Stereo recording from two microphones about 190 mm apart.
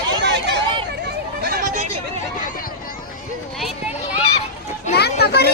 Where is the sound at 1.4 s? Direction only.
55° right (ahead or behind).